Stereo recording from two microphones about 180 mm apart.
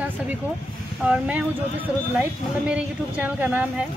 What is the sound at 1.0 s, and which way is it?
A woman's voice, 5° right (ahead or behind).